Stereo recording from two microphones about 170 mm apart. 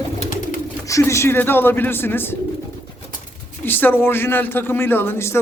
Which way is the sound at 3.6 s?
10° left (ahead or behind).